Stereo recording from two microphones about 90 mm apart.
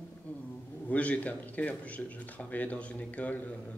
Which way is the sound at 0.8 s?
15° left (ahead or behind).